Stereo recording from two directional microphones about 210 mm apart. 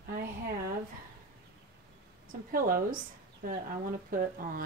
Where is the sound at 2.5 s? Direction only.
40° right (ahead or behind).